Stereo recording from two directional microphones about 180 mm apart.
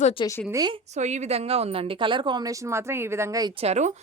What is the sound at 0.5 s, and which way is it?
Speech, 25° right (ahead or behind).